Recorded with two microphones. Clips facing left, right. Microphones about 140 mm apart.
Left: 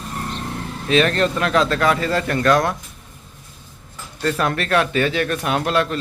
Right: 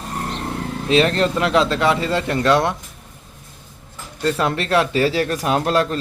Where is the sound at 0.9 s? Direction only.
25° right (ahead or behind).